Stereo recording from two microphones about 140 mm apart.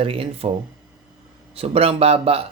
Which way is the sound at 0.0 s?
40° right (ahead or behind).